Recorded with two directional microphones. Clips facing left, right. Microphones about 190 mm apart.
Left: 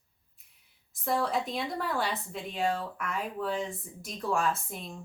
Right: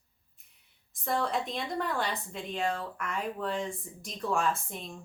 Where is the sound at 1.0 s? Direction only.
Centre (ahead or behind).